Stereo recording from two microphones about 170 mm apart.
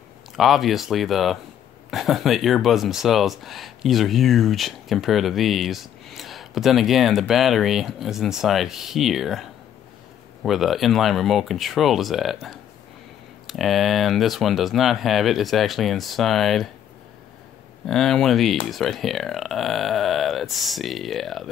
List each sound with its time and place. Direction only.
0.4 s speech: centre (ahead or behind)
17.8 s speech: centre (ahead or behind)